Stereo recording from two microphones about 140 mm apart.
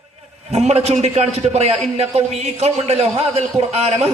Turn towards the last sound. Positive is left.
turn(degrees=-50)  # may be behind; listen again after turning